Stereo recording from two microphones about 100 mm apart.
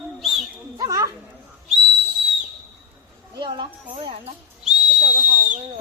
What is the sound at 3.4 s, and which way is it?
Music, 55° right (ahead or behind).